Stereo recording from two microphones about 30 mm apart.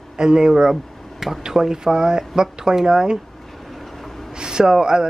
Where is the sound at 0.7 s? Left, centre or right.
Centre.